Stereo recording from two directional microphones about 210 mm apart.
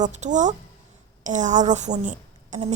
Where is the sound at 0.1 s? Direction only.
35° right (ahead or behind).